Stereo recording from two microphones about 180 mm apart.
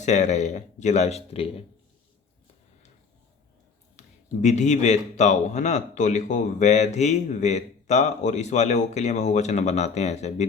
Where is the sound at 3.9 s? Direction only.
40° left (ahead or behind).